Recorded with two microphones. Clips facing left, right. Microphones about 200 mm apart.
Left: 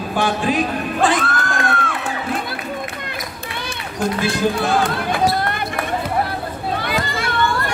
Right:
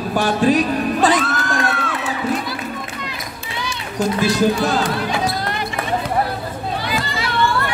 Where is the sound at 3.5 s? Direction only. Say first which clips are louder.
Right 4 dB; 55° left (ahead or behind).